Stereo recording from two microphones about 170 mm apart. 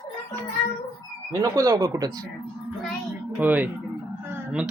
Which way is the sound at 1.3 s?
20° right (ahead or behind).